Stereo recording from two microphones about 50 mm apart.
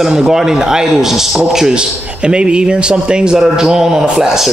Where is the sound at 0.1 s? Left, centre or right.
Centre.